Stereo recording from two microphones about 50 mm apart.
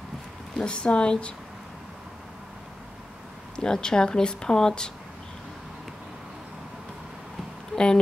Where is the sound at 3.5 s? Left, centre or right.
Centre.